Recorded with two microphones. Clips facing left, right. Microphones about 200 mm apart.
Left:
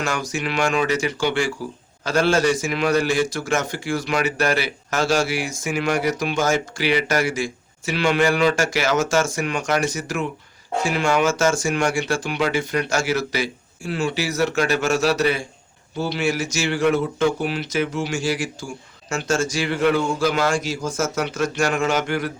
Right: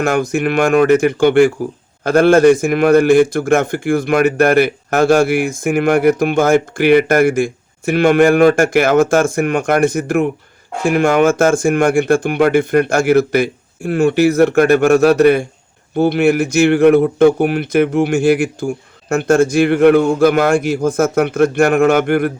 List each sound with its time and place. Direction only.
0.0 s a man's voice: 55° right (ahead or behind)